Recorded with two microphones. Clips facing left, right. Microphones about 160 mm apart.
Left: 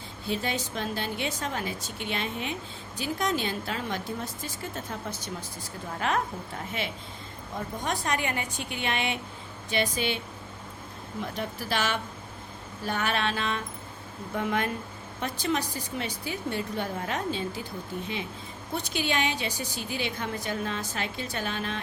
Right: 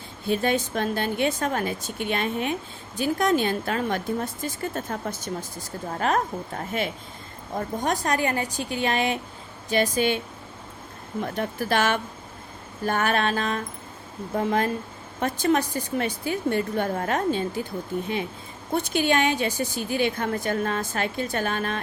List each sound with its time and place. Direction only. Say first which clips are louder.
0.3 s a woman's voice: right 7 dB; 55° right (ahead or behind)
11.2 s a woman's voice: right 6 dB; 50° right (ahead or behind); by 14.7 s 35° right (ahead or behind)
15.2 s a woman's voice: right 7 dB; 50° right (ahead or behind)
18.7 s a woman's voice: right 7 dB; 50° right (ahead or behind)